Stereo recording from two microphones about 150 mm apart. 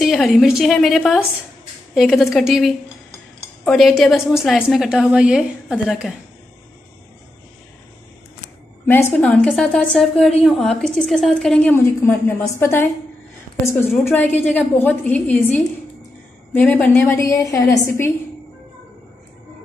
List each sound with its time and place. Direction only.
0.0 s a woman's voice: centre (ahead or behind)
8.8 s a woman's voice: 15° left (ahead or behind)
9.2 s a woman's voice: 5° left (ahead or behind)
14.1 s a woman's voice: 10° left (ahead or behind)